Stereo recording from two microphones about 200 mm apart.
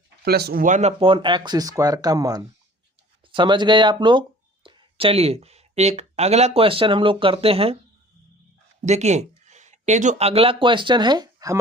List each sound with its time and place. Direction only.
0.3 s speech: 50° right (ahead or behind); by 7.8 s 30° right (ahead or behind)
8.8 s speech: 35° right (ahead or behind); by 11.5 s 20° right (ahead or behind)